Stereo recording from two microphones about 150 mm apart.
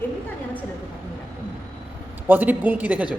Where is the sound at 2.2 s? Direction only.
10° right (ahead or behind).